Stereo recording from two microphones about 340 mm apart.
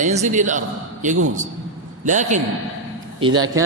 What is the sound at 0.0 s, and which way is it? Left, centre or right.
Speech, right.